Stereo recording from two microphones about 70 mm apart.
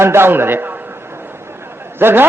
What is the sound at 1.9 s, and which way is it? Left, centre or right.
Speech, right.